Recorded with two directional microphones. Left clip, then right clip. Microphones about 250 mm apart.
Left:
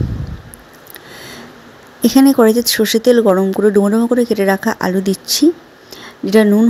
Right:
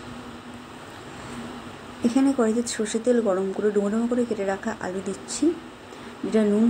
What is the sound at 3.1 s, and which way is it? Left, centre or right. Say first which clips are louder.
A woman's voice: left 9 dB; left.